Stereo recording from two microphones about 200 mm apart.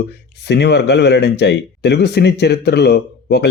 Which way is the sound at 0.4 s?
55° left (ahead or behind).